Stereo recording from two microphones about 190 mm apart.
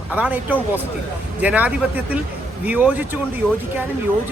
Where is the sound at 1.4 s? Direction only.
10° right (ahead or behind).